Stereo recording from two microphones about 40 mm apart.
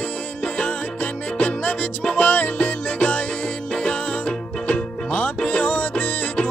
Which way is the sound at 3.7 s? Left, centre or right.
Left.